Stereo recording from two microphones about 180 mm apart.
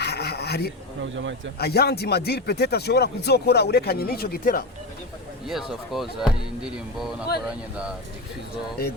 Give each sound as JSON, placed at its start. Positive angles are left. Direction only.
{"t": 0.0, "sound": "rub", "side_deg": 65}
{"t": 1.5, "sound": "speech", "side_deg": 60}
{"t": 5.5, "sound": "speech", "side_deg": 0}